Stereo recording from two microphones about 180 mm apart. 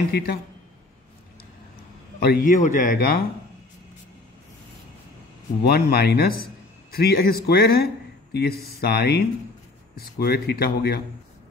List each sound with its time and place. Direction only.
2.1 s a man's voice: 55° left (ahead or behind)
5.6 s a man's voice: 60° left (ahead or behind)